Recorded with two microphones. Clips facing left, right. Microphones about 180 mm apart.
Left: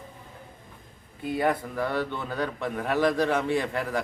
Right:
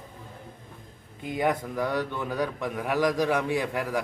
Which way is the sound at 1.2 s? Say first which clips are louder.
Left 1 dB; 15° right (ahead or behind).